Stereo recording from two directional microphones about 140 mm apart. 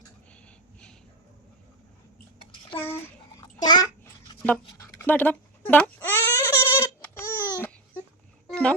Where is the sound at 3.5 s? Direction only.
30° left (ahead or behind).